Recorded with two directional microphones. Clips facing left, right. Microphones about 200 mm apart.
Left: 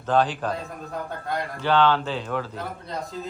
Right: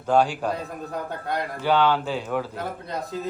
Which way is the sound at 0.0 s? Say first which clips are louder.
Right 1 dB; 10° right (ahead or behind).